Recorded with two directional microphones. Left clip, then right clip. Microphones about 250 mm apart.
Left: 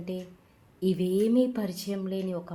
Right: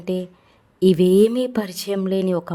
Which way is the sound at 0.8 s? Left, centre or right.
Right.